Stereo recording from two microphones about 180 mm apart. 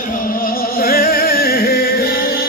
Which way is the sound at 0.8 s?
55° left (ahead or behind).